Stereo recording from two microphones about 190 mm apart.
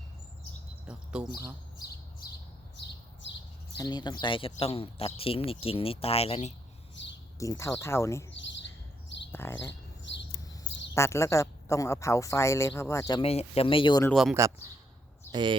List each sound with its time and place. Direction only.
0.9 s bird: 5° right (ahead or behind)
3.2 s a sound: 70° left (ahead or behind)
3.8 s speech: 20° left (ahead or behind)
6.9 s a sound: 70° left (ahead or behind)
7.3 s a woman's voice: 15° left (ahead or behind)
8.3 s a sound: 75° left (ahead or behind)
9.3 s bird: 10° left (ahead or behind)
10.9 s a woman's voice: 15° left (ahead or behind)
13.2 s speech: 30° left (ahead or behind)
14.1 s speech: centre (ahead or behind)
15.3 s speech: 25° right (ahead or behind)